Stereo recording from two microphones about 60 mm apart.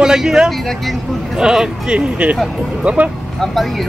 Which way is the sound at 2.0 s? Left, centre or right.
Right.